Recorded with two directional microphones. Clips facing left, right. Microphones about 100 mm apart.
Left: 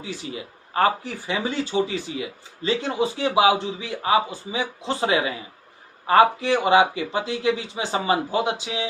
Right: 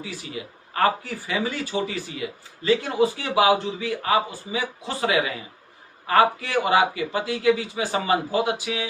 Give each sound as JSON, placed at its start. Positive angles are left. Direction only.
{"t": 0.7, "sound": "speech", "side_deg": 25}